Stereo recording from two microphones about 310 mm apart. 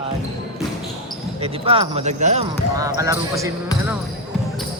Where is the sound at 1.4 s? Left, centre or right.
Centre.